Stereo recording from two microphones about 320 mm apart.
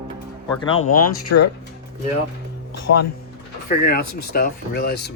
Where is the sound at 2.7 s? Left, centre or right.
Left.